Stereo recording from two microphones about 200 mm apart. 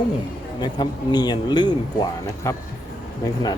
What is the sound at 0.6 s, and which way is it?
Speech, 20° left (ahead or behind).